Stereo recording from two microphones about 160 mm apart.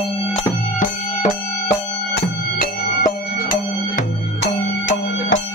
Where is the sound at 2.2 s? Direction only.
70° left (ahead or behind).